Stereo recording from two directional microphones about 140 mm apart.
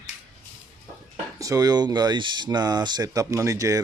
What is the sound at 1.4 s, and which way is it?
Speech, 25° right (ahead or behind).